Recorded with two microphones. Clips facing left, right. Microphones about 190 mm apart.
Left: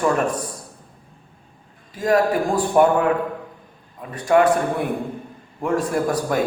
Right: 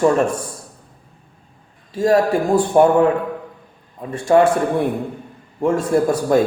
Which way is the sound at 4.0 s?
30° right (ahead or behind).